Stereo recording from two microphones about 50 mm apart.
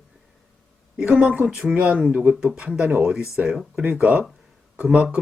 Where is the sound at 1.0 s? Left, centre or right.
Centre.